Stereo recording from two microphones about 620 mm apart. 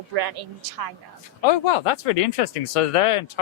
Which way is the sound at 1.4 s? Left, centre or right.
Left.